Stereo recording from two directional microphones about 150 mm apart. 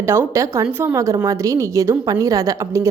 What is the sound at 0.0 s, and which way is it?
A woman's voice, 15° right (ahead or behind).